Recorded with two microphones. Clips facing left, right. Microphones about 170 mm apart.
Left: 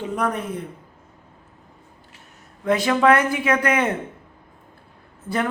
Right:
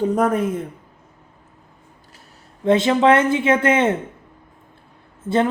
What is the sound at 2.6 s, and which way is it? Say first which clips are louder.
A man's voice: right 3 dB; 25° right (ahead or behind).